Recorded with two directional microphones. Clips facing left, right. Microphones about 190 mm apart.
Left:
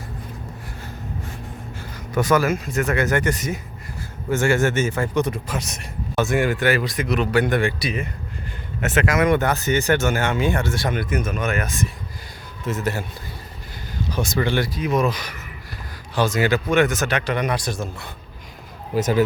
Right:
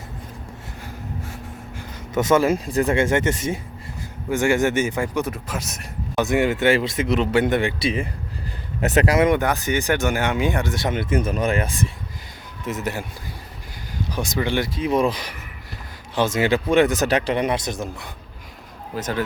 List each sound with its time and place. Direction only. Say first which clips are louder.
1.7 s speech: right 1 dB; 20° right (ahead or behind)
4.3 s speech: even; 15° right (ahead or behind)
6.1 s speech: right 1 dB; 20° right (ahead or behind); by 9.2 s 35° right (ahead or behind)
9.2 s speech: even; 15° right (ahead or behind); by 11.9 s 30° right (ahead or behind)
12.6 s speech: left 2 dB; 15° right (ahead or behind)
14.1 s speech: left 1 dB; 15° right (ahead or behind)
14.7 s speech: right 1 dB; 30° right (ahead or behind)
18.9 s speech: left 6 dB; 10° left (ahead or behind)